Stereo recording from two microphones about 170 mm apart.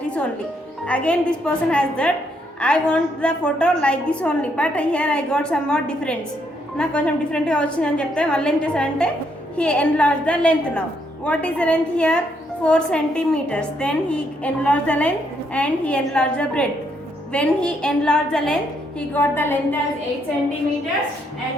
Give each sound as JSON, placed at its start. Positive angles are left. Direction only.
{"t": 0.0, "sound": "music", "side_deg": 5}
{"t": 0.9, "sound": "a woman's voice", "side_deg": 5}